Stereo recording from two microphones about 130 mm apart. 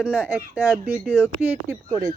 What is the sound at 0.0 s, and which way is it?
Speech, 10° right (ahead or behind).